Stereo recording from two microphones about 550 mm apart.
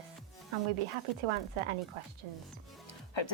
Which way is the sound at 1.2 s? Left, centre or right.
Right.